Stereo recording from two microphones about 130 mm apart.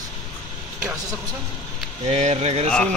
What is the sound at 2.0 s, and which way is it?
Speech, 55° right (ahead or behind).